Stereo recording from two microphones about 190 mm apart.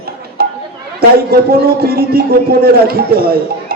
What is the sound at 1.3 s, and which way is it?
A man's voice, 50° right (ahead or behind).